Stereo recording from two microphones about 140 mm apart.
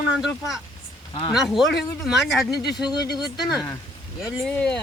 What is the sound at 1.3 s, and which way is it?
Speech, centre (ahead or behind).